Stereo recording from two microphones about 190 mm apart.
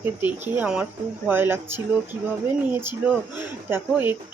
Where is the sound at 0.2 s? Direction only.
10° right (ahead or behind).